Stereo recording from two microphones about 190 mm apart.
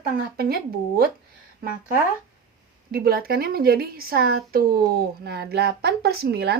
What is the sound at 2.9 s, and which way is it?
A woman's voice, 55° right (ahead or behind).